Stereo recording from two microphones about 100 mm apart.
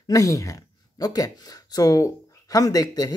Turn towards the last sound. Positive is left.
turn(degrees=35)  # may be behind; listen again after turning